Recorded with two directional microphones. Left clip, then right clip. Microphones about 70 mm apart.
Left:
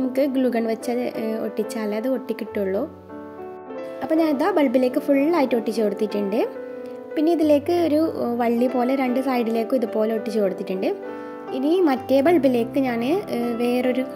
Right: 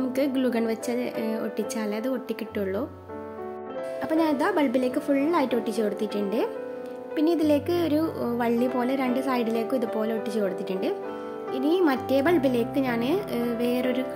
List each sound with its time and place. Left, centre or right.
0.1 s a woman's voice: left
4.0 s speech: left